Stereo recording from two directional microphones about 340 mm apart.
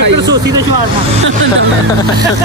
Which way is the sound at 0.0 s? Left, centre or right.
Right.